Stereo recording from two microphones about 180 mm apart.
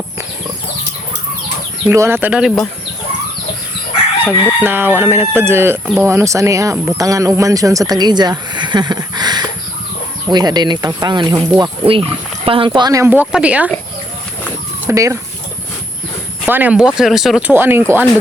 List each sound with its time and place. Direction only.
1.9 s speech: 15° right (ahead or behind)
4.6 s speech: 10° right (ahead or behind)
14.8 s speech: 15° right (ahead or behind)
16.5 s speech: 10° right (ahead or behind)